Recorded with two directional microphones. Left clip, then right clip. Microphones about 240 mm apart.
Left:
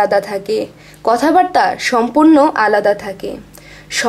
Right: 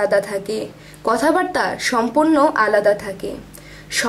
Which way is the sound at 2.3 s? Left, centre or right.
Left.